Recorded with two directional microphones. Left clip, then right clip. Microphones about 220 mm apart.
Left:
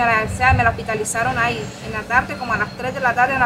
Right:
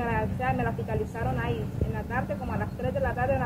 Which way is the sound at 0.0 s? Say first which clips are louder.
Left 13 dB; 25° left (ahead or behind).